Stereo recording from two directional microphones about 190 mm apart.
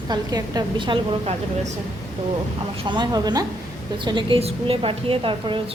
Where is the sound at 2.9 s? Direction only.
20° right (ahead or behind).